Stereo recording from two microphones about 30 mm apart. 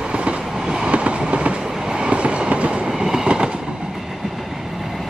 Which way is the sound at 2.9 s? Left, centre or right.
Centre.